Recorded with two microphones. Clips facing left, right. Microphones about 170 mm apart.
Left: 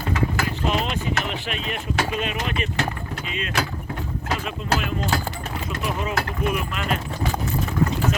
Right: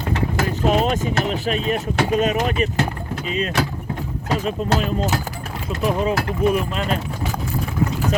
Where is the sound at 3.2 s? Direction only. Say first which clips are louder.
Right 5 dB; 40° right (ahead or behind).